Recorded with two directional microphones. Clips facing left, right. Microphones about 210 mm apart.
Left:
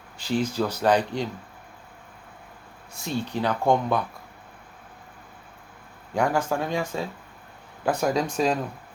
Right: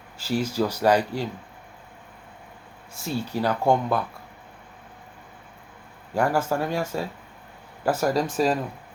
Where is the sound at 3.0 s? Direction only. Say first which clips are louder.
Right 1 dB; 10° right (ahead or behind).